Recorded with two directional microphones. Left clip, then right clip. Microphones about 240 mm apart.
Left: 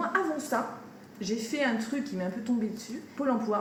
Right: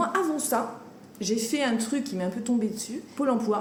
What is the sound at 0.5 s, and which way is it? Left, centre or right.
A woman's voice, right.